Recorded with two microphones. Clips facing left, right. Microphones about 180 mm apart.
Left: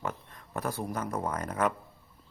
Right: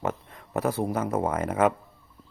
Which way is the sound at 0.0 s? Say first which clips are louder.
Right 6 dB; 70° right (ahead or behind).